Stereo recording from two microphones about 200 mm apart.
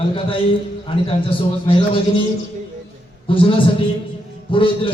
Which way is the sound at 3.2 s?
25° left (ahead or behind).